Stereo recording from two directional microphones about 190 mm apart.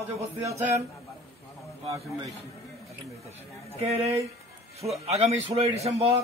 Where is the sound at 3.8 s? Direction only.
30° right (ahead or behind).